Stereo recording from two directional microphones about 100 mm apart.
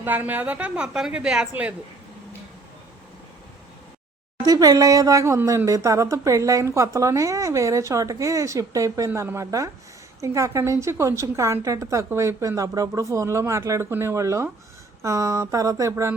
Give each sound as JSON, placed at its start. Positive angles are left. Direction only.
{"t": 0.0, "sound": "a woman's voice", "side_deg": -20}
{"t": 4.4, "sound": "a woman's voice", "side_deg": -40}